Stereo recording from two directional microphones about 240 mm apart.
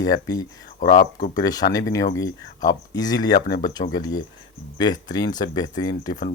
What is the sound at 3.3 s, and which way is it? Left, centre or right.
Speech, left.